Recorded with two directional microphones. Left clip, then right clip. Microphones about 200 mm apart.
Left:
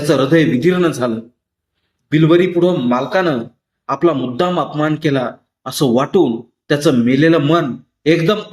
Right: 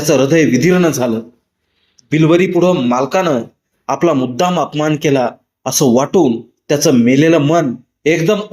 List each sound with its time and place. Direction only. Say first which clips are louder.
0.1 s speech: right 2 dB; 15° right (ahead or behind)